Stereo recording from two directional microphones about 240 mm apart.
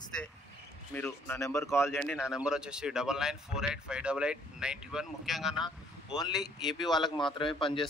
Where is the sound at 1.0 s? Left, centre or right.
Centre.